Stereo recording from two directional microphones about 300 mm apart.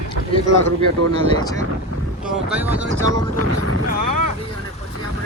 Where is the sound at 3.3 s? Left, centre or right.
Right.